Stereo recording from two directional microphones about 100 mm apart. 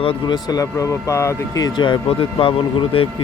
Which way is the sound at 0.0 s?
65° left (ahead or behind).